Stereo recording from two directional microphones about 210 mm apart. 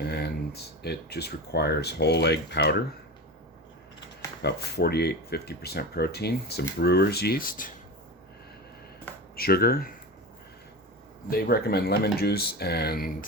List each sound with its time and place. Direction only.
0.0 s speech: 50° left (ahead or behind)
4.4 s speech: 50° left (ahead or behind)
9.3 s speech: 45° left (ahead or behind)
11.3 s speech: 45° left (ahead or behind)